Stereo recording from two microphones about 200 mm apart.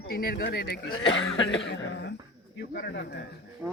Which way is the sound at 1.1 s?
70° left (ahead or behind).